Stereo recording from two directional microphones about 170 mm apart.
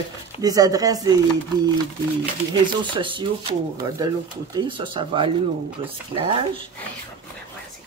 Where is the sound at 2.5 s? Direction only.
30° right (ahead or behind).